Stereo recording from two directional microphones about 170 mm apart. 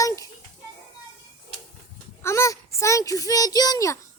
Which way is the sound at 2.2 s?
15° left (ahead or behind).